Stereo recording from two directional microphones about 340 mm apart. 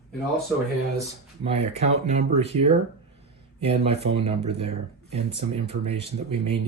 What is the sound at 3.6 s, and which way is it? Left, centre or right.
Speech, centre.